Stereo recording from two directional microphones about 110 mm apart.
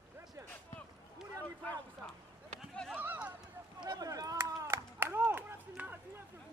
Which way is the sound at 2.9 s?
15° right (ahead or behind).